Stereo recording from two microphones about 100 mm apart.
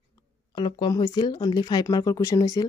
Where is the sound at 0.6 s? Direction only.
45° left (ahead or behind).